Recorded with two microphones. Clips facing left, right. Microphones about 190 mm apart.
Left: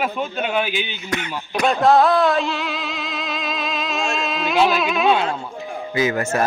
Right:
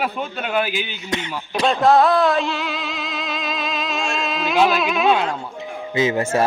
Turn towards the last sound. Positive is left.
turn(degrees=-30)  # may be behind; listen again after turning